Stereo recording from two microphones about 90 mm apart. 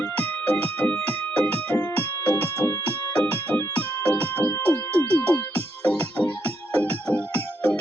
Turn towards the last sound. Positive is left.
turn(degrees=15)  # may be behind; listen again after turning